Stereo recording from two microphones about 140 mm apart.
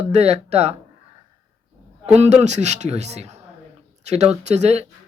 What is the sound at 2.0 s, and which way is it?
Speech, 50° right (ahead or behind).